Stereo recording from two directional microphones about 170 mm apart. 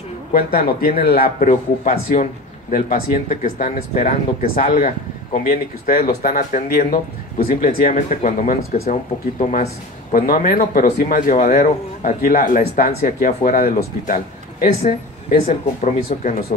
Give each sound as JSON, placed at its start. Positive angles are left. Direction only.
{"t": 0.3, "sound": "speech", "side_deg": 60}
{"t": 10.1, "sound": "speech", "side_deg": 60}